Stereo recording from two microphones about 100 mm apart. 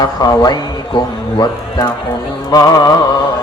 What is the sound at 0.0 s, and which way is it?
A man's voice, 40° left (ahead or behind).